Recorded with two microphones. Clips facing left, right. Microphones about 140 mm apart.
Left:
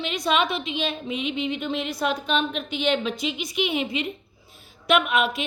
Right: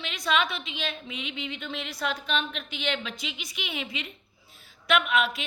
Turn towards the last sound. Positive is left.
turn(degrees=15)  # may be behind; listen again after turning